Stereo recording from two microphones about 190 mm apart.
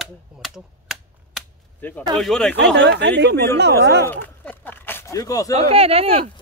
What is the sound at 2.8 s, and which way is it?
Speech, 65° right (ahead or behind).